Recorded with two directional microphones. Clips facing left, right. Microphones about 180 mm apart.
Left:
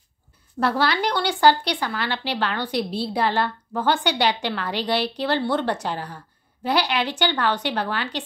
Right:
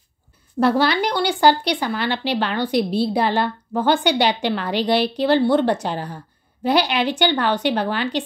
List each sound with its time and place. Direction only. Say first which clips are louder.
0.6 s speech: right 5 dB; 20° right (ahead or behind)